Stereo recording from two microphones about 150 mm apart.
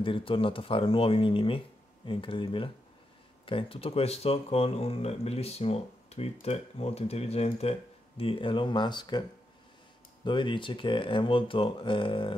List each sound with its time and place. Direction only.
0.0 s speech: 35° left (ahead or behind)
10.2 s speech: 30° left (ahead or behind)